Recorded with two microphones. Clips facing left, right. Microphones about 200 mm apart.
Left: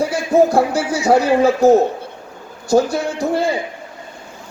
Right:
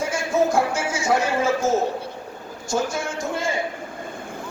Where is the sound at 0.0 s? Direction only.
35° left (ahead or behind).